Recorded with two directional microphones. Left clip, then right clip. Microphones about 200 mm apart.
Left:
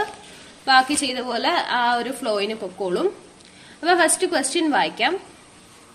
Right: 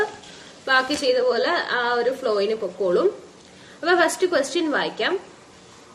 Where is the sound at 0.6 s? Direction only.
40° left (ahead or behind).